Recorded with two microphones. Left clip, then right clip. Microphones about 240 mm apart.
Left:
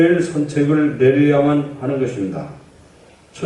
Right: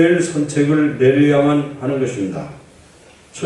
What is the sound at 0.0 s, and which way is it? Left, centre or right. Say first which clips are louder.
A man's voice: right 1 dB; centre.